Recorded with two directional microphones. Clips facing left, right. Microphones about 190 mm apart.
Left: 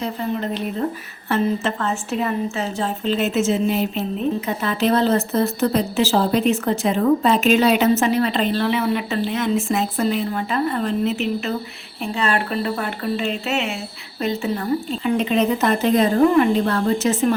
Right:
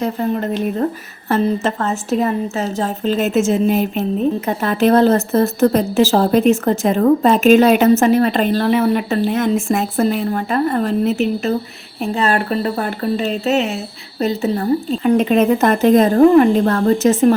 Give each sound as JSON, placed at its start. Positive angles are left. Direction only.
{"t": 0.0, "sound": "a woman's voice", "side_deg": -45}